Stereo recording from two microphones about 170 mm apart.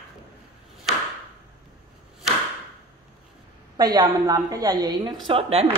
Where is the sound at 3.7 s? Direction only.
25° right (ahead or behind).